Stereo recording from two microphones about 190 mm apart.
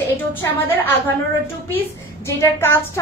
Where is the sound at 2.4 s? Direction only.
10° left (ahead or behind).